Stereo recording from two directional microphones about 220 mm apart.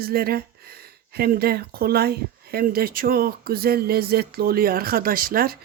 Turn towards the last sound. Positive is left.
turn(degrees=-40)  # may be behind; listen again after turning